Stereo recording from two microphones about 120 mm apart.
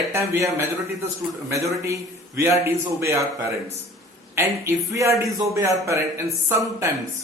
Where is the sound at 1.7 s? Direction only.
25° right (ahead or behind).